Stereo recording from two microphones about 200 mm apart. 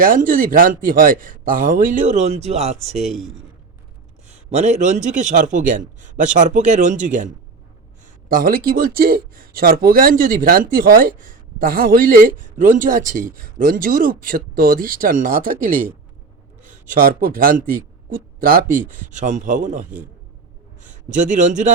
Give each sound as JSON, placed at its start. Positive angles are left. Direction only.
{"t": 0.0, "sound": "speech", "side_deg": -45}
{"t": 4.3, "sound": "speech", "side_deg": -35}